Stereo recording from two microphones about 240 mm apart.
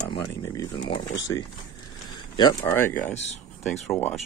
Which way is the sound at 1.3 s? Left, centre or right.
Left.